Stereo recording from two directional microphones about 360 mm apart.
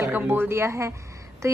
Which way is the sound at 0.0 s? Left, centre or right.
Centre.